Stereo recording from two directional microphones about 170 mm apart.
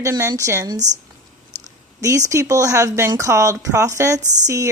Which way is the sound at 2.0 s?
20° right (ahead or behind).